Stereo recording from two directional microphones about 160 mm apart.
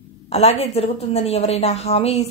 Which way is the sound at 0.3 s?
40° left (ahead or behind).